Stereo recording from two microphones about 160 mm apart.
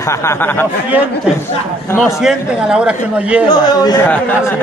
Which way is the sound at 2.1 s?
5° right (ahead or behind).